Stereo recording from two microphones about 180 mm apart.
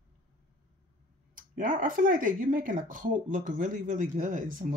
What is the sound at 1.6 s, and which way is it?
Speech, 50° right (ahead or behind).